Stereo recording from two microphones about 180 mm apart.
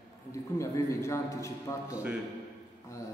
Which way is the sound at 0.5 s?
15° left (ahead or behind).